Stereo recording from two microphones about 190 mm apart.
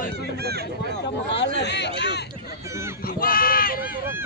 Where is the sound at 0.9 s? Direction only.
65° left (ahead or behind).